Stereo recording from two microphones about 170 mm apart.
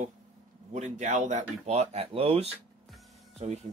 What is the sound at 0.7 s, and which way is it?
Speech, 45° right (ahead or behind).